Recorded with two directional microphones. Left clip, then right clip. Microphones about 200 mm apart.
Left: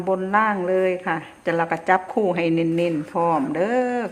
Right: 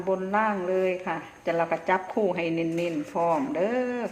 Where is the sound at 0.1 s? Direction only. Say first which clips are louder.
Left 5 dB; 35° left (ahead or behind).